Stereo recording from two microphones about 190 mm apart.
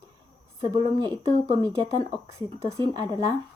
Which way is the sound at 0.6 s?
25° right (ahead or behind).